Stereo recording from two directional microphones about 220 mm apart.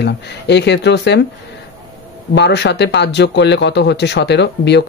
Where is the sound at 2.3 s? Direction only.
50° left (ahead or behind).